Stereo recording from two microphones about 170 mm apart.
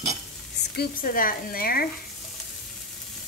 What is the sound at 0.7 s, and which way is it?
Speech, 55° left (ahead or behind).